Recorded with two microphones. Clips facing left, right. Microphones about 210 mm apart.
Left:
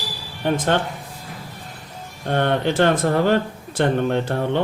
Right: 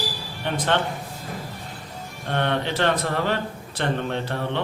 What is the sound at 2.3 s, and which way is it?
Speech, 50° left (ahead or behind).